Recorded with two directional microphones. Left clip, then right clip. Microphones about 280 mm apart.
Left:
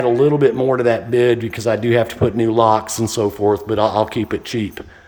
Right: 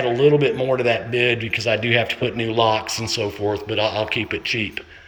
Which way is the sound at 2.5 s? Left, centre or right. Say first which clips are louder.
Left 3 dB; left.